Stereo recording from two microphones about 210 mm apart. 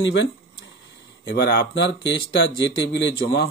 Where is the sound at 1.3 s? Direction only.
50° left (ahead or behind).